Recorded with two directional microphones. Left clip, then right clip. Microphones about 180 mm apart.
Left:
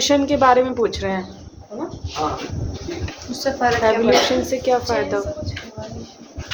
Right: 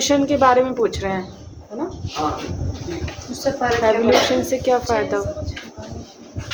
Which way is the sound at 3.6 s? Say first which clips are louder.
Left 2 dB; 55° left (ahead or behind).